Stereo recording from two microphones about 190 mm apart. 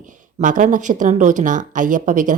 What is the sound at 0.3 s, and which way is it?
Speech, 40° right (ahead or behind).